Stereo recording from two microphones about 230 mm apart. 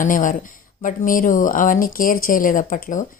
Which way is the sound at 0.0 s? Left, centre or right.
Left.